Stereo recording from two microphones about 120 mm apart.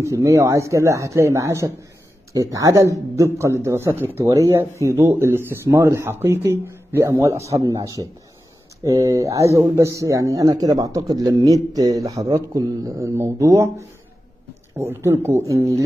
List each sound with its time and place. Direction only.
0.0 s speech: 25° right (ahead or behind)